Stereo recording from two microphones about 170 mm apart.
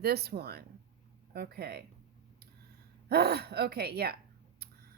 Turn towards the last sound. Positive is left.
turn(degrees=-70)  # may be behind; listen again after turning